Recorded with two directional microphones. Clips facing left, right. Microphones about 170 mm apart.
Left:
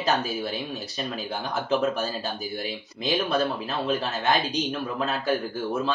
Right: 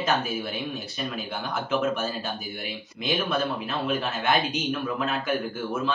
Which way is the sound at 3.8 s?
35° left (ahead or behind).